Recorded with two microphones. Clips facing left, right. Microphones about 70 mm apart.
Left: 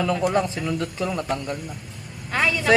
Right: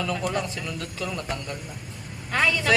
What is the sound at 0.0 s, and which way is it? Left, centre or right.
Speech, left.